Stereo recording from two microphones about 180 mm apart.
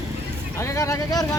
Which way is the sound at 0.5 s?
15° left (ahead or behind).